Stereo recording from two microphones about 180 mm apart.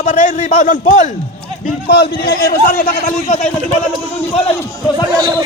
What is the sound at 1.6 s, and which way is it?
Speech, 65° left (ahead or behind).